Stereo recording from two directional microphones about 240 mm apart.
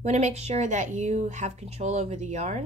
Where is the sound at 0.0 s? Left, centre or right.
Right.